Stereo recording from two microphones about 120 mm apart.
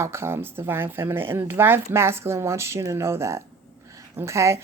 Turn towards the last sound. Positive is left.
turn(degrees=-25)  # may be behind; listen again after turning